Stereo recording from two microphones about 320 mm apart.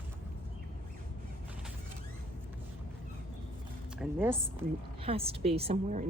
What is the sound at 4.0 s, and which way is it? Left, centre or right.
Speech, centre.